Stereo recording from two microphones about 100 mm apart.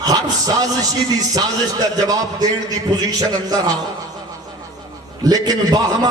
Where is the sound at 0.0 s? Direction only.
40° right (ahead or behind).